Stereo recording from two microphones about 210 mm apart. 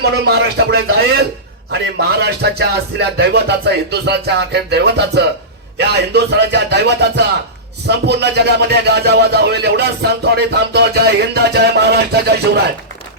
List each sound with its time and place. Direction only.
0.0 s speech: 50° right (ahead or behind)